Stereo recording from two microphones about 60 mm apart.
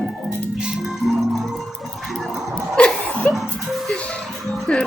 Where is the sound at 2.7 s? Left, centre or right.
Centre.